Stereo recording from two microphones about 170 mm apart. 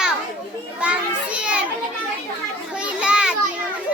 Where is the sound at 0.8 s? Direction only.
5° right (ahead or behind).